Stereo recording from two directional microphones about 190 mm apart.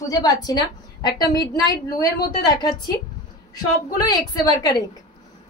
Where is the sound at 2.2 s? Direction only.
20° left (ahead or behind).